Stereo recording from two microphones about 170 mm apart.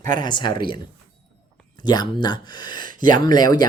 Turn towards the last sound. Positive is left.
turn(degrees=25)  # may be behind; listen again after turning